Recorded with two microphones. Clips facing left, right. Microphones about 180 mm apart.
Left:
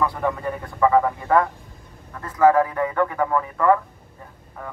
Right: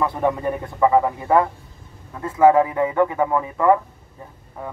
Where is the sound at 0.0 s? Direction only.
20° right (ahead or behind).